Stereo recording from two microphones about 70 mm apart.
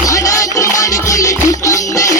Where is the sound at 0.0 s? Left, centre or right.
Left.